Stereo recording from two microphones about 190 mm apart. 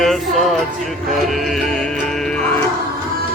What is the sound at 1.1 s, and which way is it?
Music, centre (ahead or behind).